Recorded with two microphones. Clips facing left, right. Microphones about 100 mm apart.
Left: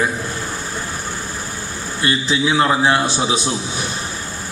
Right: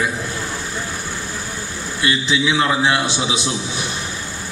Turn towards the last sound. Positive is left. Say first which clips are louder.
# left 2 dB
turn(degrees=40)  # may be behind; listen again after turning